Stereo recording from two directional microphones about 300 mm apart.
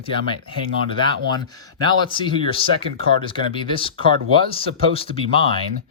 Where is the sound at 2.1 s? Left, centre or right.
Centre.